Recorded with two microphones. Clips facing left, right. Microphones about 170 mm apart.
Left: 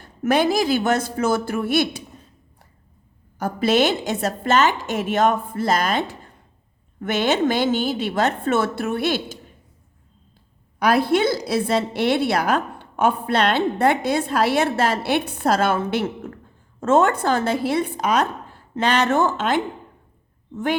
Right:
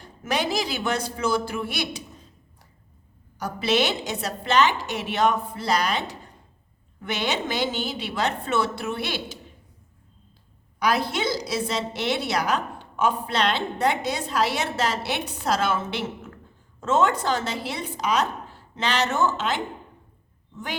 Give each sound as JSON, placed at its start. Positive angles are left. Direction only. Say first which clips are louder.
{"t": 0.2, "sound": "a woman's voice", "louder": "left 7 dB", "side_deg": 50}
{"t": 3.3, "sound": "a woman's voice", "louder": "left 5 dB", "side_deg": 50}
{"t": 10.8, "sound": "a woman's voice", "louder": "left 6 dB", "side_deg": 55}